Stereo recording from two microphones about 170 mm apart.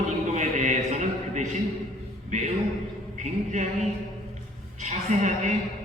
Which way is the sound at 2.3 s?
45° right (ahead or behind).